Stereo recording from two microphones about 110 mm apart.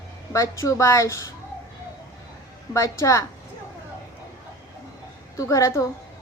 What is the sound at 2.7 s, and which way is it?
Speech, 30° left (ahead or behind).